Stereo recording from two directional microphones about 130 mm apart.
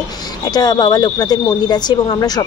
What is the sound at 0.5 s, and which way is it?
Speech, 30° left (ahead or behind).